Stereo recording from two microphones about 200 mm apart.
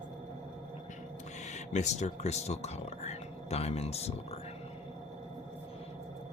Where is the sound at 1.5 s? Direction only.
35° left (ahead or behind).